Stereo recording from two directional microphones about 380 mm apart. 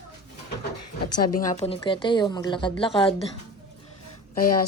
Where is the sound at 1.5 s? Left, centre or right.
Centre.